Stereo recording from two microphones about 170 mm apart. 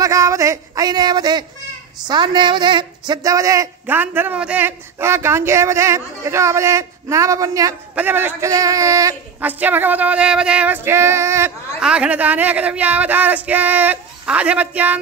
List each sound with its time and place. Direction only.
0.0 s speech: 20° right (ahead or behind)